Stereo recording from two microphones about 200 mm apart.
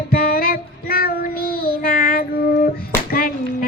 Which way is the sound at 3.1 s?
45° left (ahead or behind).